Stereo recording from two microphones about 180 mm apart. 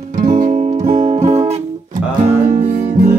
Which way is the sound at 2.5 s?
45° right (ahead or behind).